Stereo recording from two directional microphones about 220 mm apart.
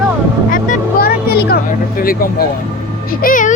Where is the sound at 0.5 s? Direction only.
40° left (ahead or behind).